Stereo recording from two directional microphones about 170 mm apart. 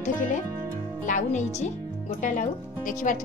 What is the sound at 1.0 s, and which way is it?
Speech, 45° left (ahead or behind).